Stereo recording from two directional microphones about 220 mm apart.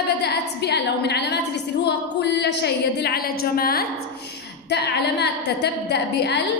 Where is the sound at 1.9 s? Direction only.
50° left (ahead or behind).